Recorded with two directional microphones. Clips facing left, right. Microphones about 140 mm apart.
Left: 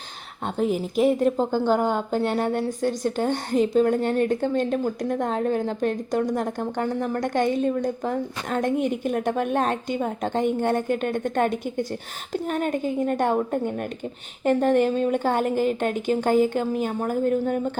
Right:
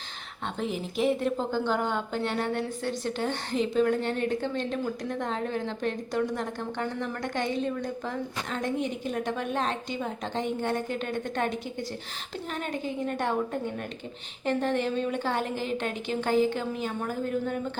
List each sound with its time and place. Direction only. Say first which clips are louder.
0.4 s a woman's voice: left 7 dB; 45° left (ahead or behind)